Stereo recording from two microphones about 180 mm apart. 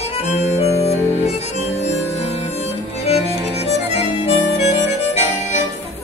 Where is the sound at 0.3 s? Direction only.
35° left (ahead or behind).